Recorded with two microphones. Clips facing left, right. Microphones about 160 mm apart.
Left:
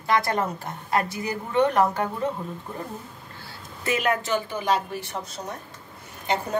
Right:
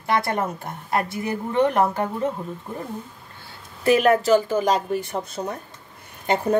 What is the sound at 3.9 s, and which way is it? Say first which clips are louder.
Speech: right 8 dB; 35° right (ahead or behind).